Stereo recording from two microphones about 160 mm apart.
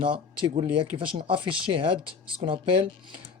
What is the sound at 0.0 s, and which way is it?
Speech, 30° right (ahead or behind).